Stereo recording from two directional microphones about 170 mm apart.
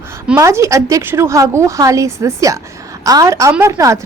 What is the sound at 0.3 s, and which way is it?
A woman's voice, 15° right (ahead or behind).